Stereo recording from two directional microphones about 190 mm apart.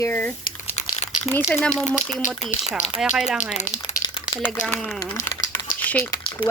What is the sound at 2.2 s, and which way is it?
Speech, 35° left (ahead or behind).